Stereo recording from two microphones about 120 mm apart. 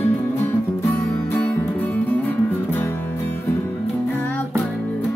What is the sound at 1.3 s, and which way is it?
Music, 15° left (ahead or behind).